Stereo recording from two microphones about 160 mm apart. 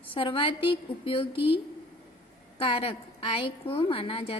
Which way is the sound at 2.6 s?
35° left (ahead or behind).